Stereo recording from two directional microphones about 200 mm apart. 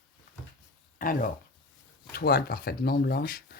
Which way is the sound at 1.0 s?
45° left (ahead or behind).